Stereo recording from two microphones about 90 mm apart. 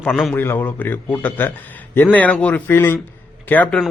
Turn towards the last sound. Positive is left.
turn(degrees=20)  # may be behind; listen again after turning